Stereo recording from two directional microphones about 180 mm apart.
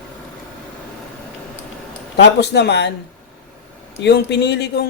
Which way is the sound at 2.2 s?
70° left (ahead or behind).